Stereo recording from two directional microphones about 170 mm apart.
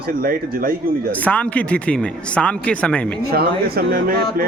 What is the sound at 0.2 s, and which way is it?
Speech, 60° right (ahead or behind).